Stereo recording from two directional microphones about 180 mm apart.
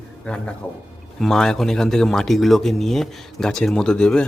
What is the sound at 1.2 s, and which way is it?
Speech, 5° left (ahead or behind).